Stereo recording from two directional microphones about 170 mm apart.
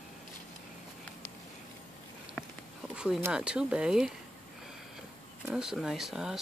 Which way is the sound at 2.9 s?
5° right (ahead or behind).